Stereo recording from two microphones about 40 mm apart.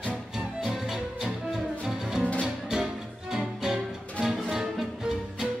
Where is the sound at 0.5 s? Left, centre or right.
Centre.